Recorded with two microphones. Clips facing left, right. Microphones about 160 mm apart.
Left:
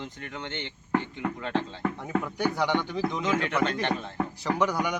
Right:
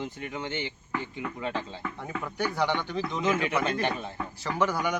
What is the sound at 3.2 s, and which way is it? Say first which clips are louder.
Speech: right 1 dB; 5° right (ahead or behind).